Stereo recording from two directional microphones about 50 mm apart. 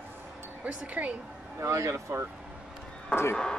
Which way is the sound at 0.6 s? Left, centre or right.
Right.